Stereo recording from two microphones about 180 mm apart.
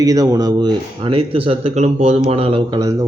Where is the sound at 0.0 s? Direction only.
20° right (ahead or behind).